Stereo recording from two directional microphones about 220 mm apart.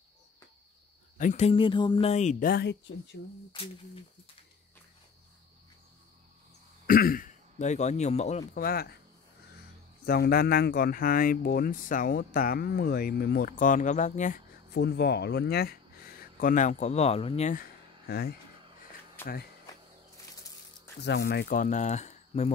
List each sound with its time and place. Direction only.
1.1 s speech: 35° left (ahead or behind); by 3.2 s 50° left (ahead or behind)
3.5 s speech: 25° left (ahead or behind)
6.9 s speech: 40° left (ahead or behind)
10.0 s speech: 45° left (ahead or behind)
14.7 s speech: 50° left (ahead or behind)
16.3 s speech: 35° left (ahead or behind)
19.2 s speech: 10° left (ahead or behind)
21.0 s speech: 50° left (ahead or behind); by 22.5 s 30° left (ahead or behind)